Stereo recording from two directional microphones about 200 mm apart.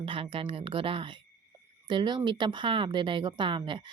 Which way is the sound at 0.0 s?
25° right (ahead or behind).